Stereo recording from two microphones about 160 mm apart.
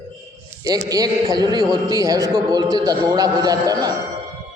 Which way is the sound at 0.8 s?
25° right (ahead or behind).